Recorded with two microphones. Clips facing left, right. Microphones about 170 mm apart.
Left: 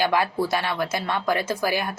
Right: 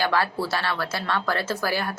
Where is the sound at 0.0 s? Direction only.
15° left (ahead or behind).